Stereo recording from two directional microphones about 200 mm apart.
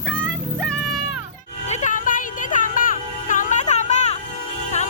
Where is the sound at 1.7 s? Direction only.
40° left (ahead or behind).